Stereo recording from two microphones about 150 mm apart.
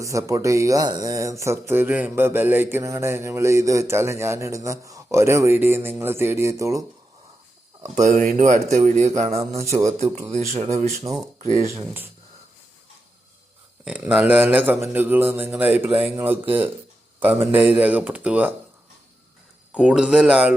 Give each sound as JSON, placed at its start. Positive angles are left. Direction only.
{"t": 0.0, "sound": "speech", "side_deg": -20}
{"t": 7.9, "sound": "speech", "side_deg": -55}
{"t": 9.3, "sound": "speech", "side_deg": -20}
{"t": 10.3, "sound": "speech", "side_deg": -50}
{"t": 11.1, "sound": "speech", "side_deg": -25}
{"t": 13.8, "sound": "speech", "side_deg": -10}
{"t": 19.7, "sound": "speech", "side_deg": -5}